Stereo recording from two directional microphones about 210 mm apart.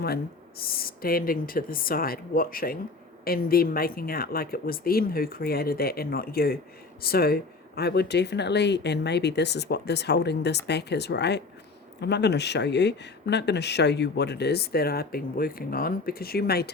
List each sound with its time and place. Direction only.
0.6 s speech: 45° left (ahead or behind)